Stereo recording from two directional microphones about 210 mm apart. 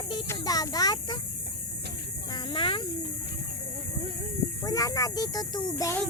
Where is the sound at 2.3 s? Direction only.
25° left (ahead or behind).